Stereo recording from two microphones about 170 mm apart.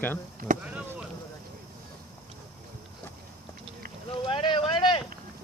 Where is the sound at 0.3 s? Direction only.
55° right (ahead or behind).